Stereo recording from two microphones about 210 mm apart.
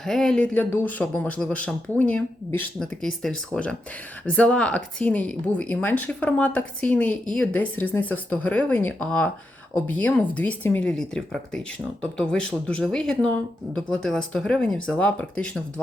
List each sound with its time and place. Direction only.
0.0 s a woman's voice: centre (ahead or behind)